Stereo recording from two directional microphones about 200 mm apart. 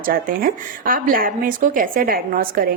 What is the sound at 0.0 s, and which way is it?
A woman's voice, 45° right (ahead or behind).